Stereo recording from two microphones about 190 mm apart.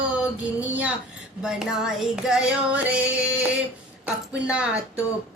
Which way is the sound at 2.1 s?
5° right (ahead or behind).